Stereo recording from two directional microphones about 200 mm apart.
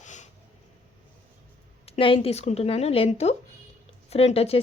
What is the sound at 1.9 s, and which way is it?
Speech, 30° left (ahead or behind).